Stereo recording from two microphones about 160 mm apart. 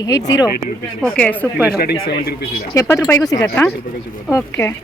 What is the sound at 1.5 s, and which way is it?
Speech, 10° right (ahead or behind).